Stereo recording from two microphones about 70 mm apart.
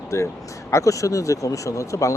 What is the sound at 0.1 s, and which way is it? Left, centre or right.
Speech, left.